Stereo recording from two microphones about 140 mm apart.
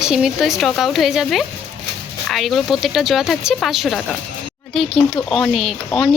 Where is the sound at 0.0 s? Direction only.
5° right (ahead or behind).